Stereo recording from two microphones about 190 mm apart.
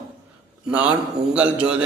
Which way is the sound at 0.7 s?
5° right (ahead or behind).